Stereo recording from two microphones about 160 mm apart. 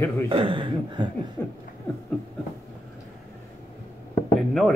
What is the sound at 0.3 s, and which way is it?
Speech, 30° right (ahead or behind).